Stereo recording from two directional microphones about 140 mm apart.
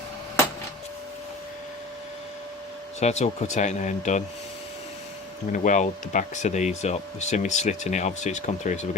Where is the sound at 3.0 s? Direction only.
55° left (ahead or behind).